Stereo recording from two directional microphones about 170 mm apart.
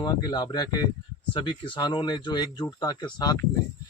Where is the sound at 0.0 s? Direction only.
25° left (ahead or behind).